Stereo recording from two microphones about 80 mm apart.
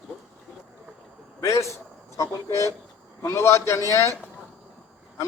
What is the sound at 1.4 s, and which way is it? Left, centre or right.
A man's voice, left.